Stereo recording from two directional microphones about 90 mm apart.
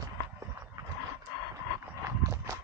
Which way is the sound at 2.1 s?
35° right (ahead or behind).